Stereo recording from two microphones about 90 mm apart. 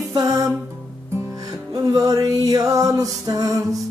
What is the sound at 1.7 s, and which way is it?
Music, 40° right (ahead or behind).